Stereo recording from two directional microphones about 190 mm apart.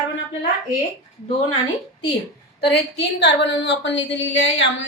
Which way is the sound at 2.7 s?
65° left (ahead or behind).